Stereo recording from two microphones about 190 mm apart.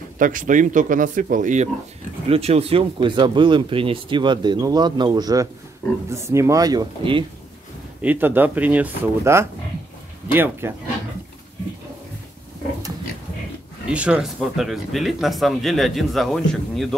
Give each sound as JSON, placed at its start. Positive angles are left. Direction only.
{"t": 0.2, "sound": "speech", "side_deg": -45}
{"t": 8.0, "sound": "speech", "side_deg": -10}
{"t": 13.8, "sound": "speech", "side_deg": -5}